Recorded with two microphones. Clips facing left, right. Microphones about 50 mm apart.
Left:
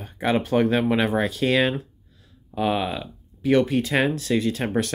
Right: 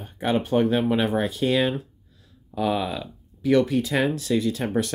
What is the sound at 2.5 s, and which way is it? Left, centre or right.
Speech, left.